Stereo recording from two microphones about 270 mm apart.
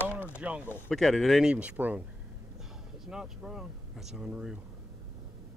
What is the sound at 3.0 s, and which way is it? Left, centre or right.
Speech, centre.